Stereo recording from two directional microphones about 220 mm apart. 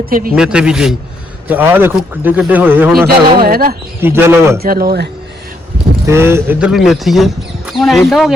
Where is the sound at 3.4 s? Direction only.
45° right (ahead or behind).